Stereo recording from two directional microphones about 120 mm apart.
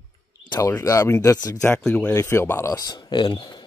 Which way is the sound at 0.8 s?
25° left (ahead or behind).